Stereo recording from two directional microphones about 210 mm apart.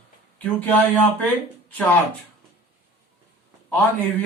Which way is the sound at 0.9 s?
10° left (ahead or behind).